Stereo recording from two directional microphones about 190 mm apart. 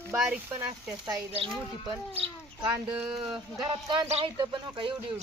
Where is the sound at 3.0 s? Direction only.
5° right (ahead or behind).